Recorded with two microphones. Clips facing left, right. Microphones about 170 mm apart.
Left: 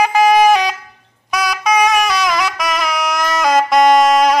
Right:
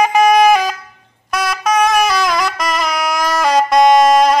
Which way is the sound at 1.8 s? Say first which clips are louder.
Right 2 dB; centre (ahead or behind).